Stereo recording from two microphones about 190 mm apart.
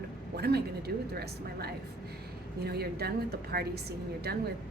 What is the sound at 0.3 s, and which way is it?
A woman's voice, 55° right (ahead or behind).